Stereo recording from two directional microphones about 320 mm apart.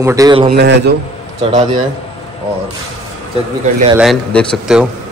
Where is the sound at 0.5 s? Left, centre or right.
Right.